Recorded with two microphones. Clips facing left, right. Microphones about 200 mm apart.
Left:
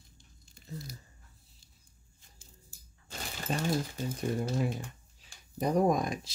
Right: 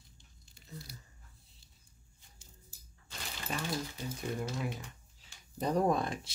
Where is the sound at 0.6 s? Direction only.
45° left (ahead or behind).